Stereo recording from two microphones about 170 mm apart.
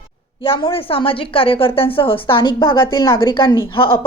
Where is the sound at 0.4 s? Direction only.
35° left (ahead or behind).